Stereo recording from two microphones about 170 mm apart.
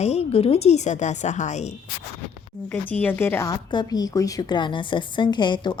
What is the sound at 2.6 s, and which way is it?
A woman's voice, 10° left (ahead or behind).